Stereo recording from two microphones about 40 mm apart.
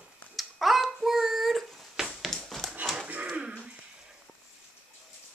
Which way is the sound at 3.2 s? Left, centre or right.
Right.